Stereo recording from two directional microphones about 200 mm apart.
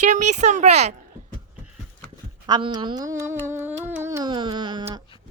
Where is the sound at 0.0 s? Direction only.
35° right (ahead or behind).